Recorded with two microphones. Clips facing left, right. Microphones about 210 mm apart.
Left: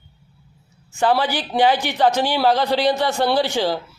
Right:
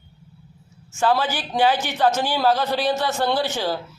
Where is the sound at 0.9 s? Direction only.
15° left (ahead or behind).